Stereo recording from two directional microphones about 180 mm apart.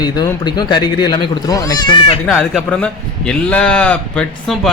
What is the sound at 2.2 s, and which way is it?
A man's voice, 5° left (ahead or behind).